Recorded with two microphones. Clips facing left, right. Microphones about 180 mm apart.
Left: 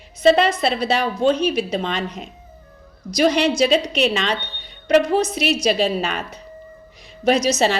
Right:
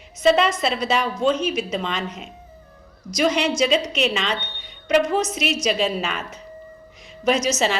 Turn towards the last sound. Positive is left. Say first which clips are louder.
# left 3 dB
turn(degrees=35)  # may be behind; listen again after turning